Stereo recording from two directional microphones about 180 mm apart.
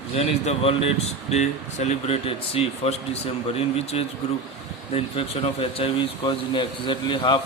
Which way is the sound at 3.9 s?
35° left (ahead or behind).